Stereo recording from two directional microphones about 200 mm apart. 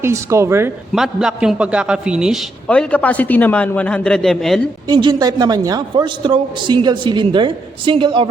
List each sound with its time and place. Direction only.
0.0 s speech: 15° right (ahead or behind)
0.9 s a man's voice: centre (ahead or behind)
4.9 s a man's voice: 20° right (ahead or behind)